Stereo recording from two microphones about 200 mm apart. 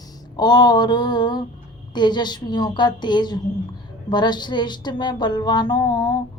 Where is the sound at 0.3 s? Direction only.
20° left (ahead or behind).